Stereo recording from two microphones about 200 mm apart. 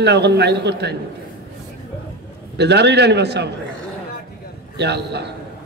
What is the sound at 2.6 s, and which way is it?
Speech, 55° right (ahead or behind).